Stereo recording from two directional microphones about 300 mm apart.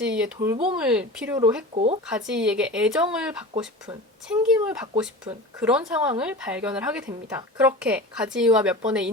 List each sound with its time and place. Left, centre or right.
0.0 s a woman's voice: centre
0.5 s speech: centre
0.8 s a woman's voice: centre
1.7 s speech: right
2.0 s a woman's voice: centre
4.5 s a woman's voice: centre